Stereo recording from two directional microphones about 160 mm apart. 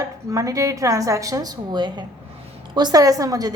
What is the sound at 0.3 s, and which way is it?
A woman's voice, 20° right (ahead or behind).